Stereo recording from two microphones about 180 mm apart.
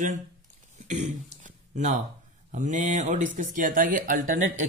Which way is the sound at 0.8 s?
40° right (ahead or behind).